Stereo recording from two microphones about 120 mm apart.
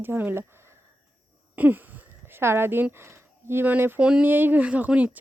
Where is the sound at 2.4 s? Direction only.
20° right (ahead or behind).